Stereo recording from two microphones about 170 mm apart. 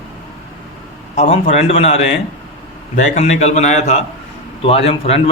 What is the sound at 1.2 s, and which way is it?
A man's voice, 40° left (ahead or behind).